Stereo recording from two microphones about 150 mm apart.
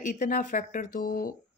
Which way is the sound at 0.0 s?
55° left (ahead or behind).